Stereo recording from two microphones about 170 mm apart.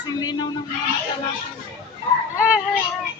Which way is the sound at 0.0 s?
25° left (ahead or behind).